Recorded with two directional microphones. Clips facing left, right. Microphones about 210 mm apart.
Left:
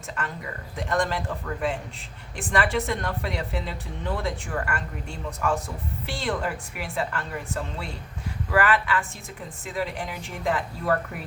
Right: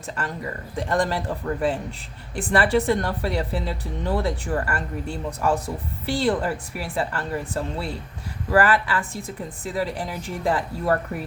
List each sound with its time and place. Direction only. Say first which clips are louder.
0.8 s speech: right 3 dB; 35° right (ahead or behind)